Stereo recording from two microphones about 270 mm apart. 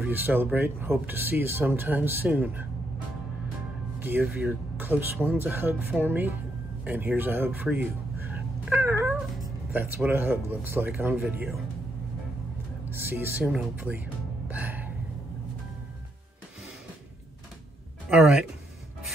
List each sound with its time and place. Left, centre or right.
0.0 s speech: centre
4.0 s speech: centre
12.9 s speech: centre
14.5 s gasp: centre
18.1 s speech: centre